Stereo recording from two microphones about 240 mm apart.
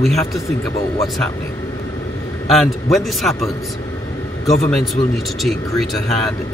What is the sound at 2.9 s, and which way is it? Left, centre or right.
Speech, centre.